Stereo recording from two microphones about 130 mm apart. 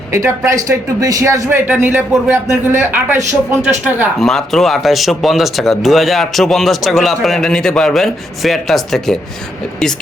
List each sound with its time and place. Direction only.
0.1 s a man's voice: 20° right (ahead or behind)
4.2 s speech: 5° left (ahead or behind)